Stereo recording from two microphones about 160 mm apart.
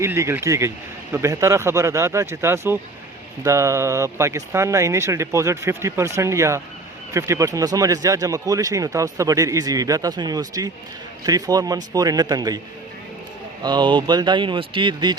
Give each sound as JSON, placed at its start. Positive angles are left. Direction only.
{"t": 0.0, "sound": "speech", "side_deg": -15}
{"t": 13.6, "sound": "speech", "side_deg": -25}